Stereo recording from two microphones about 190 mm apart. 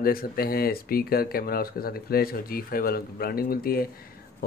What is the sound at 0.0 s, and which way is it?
Speech, 50° left (ahead or behind).